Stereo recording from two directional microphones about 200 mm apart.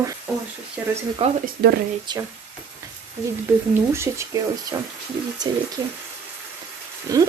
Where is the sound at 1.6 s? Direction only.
55° right (ahead or behind).